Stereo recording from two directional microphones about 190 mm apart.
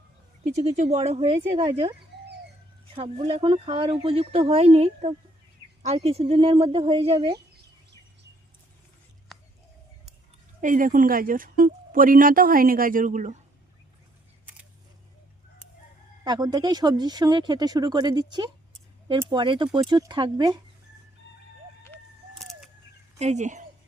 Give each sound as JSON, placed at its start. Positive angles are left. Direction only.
{"t": 0.4, "sound": "speech", "side_deg": -35}
{"t": 2.1, "sound": "bird", "side_deg": -60}
{"t": 2.9, "sound": "speech", "side_deg": -30}
{"t": 9.3, "sound": "bird", "side_deg": 0}
{"t": 10.6, "sound": "speech", "side_deg": -45}
{"t": 14.4, "sound": "single-lens reflex camera", "side_deg": -5}
{"t": 16.2, "sound": "speech", "side_deg": -20}
{"t": 22.4, "sound": "a sound", "side_deg": 0}
{"t": 23.1, "sound": "speech", "side_deg": -35}